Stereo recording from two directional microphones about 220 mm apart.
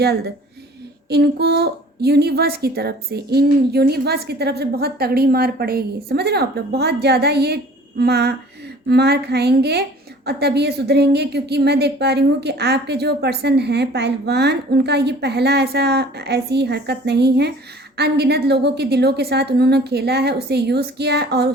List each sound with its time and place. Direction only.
1.1 s speech: 50° right (ahead or behind)